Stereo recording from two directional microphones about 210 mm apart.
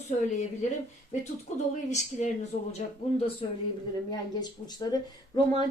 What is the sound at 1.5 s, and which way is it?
Speech, 35° left (ahead or behind).